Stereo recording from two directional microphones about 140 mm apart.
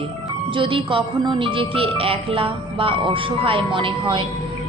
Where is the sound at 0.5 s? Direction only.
40° right (ahead or behind).